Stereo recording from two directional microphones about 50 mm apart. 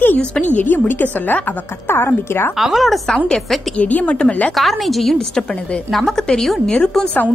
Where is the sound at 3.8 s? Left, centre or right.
Left.